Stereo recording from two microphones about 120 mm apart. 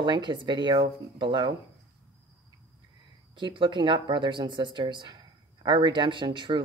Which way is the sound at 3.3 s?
40° right (ahead or behind).